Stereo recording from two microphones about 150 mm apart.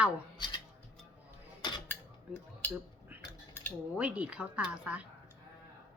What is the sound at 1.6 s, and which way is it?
Cutlery, 30° left (ahead or behind).